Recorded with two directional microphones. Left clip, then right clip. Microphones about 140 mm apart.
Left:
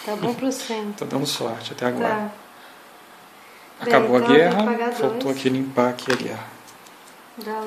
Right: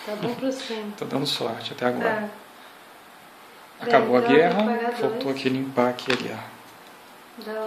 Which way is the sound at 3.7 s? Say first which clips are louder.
Left 2 dB; 20° left (ahead or behind).